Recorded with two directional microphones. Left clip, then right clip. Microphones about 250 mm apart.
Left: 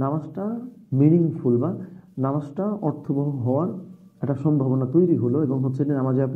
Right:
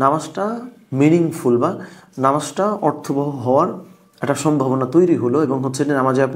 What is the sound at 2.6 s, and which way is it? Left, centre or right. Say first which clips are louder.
Speech: right 9 dB; centre.